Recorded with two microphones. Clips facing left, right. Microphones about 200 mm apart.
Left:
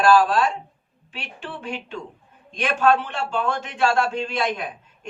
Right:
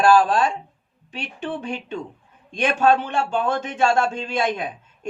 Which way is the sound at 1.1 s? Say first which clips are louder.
Right 6 dB; 40° right (ahead or behind).